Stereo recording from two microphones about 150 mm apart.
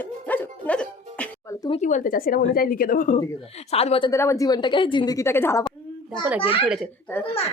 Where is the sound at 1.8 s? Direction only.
60° left (ahead or behind).